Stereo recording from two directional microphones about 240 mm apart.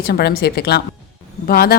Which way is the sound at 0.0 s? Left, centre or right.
Left.